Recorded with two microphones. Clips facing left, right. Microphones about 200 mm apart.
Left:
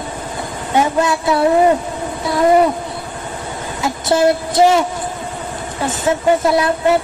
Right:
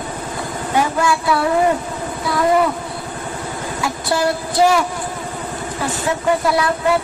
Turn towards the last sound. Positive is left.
turn(degrees=25)  # may be behind; listen again after turning